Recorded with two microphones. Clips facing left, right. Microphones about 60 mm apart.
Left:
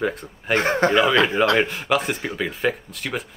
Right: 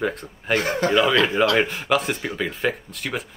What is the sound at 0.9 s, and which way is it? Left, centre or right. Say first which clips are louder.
Speech: left 1 dB; centre.